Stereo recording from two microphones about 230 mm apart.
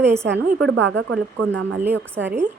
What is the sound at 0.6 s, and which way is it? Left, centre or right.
Speech, right.